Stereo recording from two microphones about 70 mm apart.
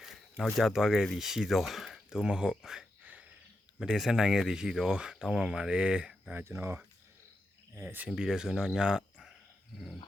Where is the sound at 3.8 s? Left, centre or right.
Centre.